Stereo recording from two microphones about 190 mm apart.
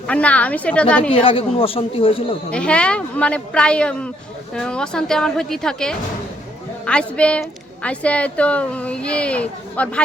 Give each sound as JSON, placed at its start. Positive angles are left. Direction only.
{"t": 0.1, "sound": "a woman's voice", "side_deg": 5}
{"t": 1.1, "sound": "speech", "side_deg": 30}
{"t": 2.5, "sound": "a woman's voice", "side_deg": 5}